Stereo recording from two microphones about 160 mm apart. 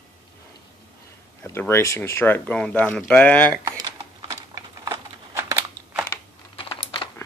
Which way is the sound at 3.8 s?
25° right (ahead or behind).